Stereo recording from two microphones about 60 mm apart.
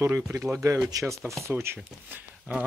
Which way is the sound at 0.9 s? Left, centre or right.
Right.